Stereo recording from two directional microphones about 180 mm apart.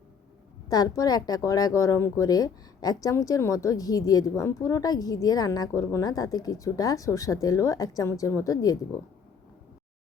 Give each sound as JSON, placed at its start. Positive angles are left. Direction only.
{"t": 0.7, "sound": "speech", "side_deg": 20}